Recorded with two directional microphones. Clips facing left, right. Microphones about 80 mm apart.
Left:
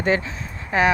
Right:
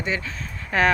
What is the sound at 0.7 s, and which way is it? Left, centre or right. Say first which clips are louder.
Speech: left 1 dB; centre.